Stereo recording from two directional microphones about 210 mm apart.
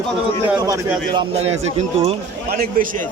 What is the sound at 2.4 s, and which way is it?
Speech, 45° right (ahead or behind).